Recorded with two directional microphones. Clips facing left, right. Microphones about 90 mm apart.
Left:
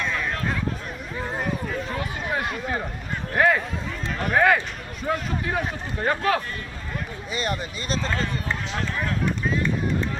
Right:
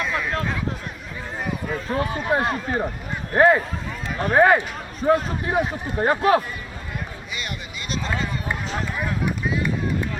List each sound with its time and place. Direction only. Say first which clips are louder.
0.0 s a sound: right 2 dB; 5° right (ahead or behind)
1.9 s speech: right 6 dB; 35° right (ahead or behind)
7.3 s speech: left 6 dB; 35° left (ahead or behind)
8.0 s speech: right 3 dB; 10° right (ahead or behind)